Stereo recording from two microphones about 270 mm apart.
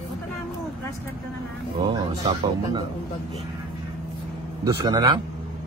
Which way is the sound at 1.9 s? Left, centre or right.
Centre.